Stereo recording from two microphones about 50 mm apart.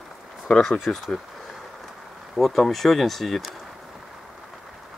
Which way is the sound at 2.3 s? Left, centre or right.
Centre.